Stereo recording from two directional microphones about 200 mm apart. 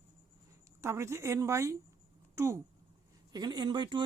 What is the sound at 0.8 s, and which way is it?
Speech, 15° right (ahead or behind).